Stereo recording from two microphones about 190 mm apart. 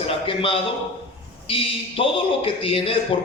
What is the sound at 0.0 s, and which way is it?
A man's voice, 30° left (ahead or behind).